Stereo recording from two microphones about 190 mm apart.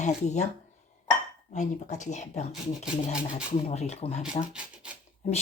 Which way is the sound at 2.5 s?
5° right (ahead or behind).